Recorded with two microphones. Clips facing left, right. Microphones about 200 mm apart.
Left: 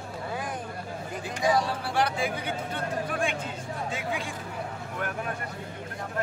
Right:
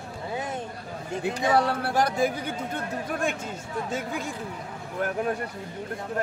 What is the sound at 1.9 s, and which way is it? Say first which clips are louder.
Speech: right 3 dB; 40° right (ahead or behind).